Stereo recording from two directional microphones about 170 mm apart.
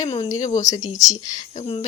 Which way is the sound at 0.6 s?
20° left (ahead or behind).